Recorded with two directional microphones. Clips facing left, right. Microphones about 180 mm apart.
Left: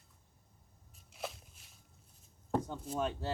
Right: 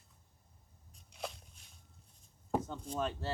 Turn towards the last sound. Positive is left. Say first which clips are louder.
# left 1 dB
turn(degrees=15)  # may be behind; listen again after turning